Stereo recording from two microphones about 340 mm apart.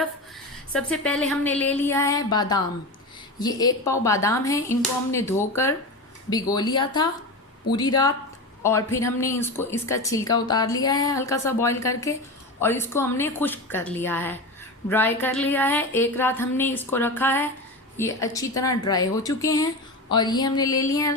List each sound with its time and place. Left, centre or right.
0.7 s a woman's voice: centre